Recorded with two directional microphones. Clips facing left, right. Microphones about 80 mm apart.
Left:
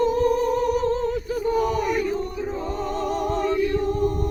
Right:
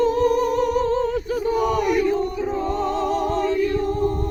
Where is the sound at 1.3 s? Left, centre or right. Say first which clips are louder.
Right 1 dB; centre.